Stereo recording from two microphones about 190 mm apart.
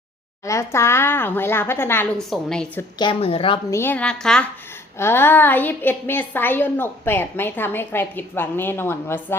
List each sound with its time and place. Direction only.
0.4 s a woman's voice: 15° left (ahead or behind)
3.0 s a woman's voice: 30° left (ahead or behind)
3.7 s a woman's voice: 10° left (ahead or behind)